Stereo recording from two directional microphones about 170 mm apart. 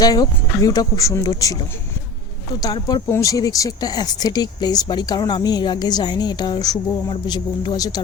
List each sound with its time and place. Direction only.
0.0 s speech: 20° left (ahead or behind)
2.6 s speech: 20° left (ahead or behind)